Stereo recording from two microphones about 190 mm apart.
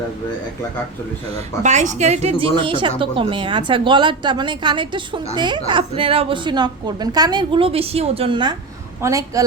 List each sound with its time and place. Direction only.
1.6 s a woman's voice: 40° right (ahead or behind); by 9.4 s 15° right (ahead or behind)